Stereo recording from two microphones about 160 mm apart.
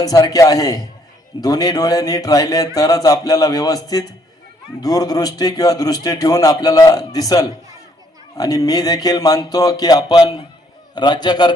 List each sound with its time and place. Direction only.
0.0 s a man's voice: 25° left (ahead or behind)